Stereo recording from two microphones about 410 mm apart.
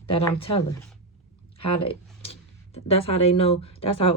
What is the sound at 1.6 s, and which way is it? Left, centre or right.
Speech, centre.